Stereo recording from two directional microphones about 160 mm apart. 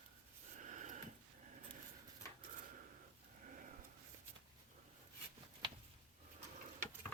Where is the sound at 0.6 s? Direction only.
50° right (ahead or behind).